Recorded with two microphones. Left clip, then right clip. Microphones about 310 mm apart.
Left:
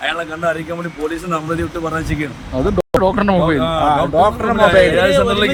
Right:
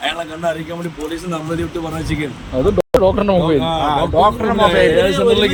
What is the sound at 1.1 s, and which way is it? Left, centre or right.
Speech, centre.